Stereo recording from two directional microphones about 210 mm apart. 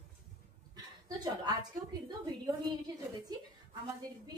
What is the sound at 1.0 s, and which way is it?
A woman's voice, 20° right (ahead or behind).